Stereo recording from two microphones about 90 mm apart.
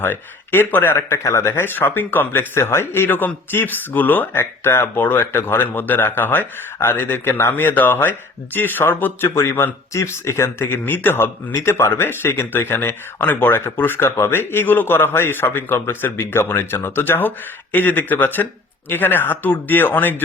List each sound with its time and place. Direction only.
0.0 s speech: 25° left (ahead or behind)